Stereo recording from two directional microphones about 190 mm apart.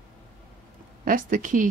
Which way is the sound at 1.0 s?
45° right (ahead or behind).